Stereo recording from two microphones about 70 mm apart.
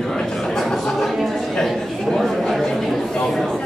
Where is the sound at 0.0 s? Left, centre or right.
Centre.